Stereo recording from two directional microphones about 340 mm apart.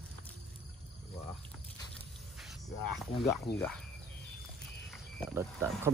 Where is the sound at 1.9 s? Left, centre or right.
Centre.